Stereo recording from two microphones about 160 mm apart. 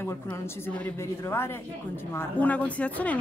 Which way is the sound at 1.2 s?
15° left (ahead or behind).